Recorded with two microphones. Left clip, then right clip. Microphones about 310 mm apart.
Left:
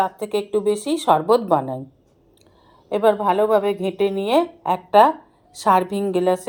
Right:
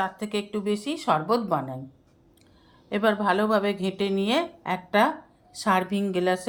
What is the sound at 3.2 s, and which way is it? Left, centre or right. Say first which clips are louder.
Speech: left 6 dB; left.